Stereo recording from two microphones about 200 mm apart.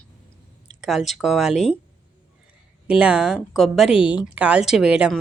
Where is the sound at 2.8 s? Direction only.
5° right (ahead or behind).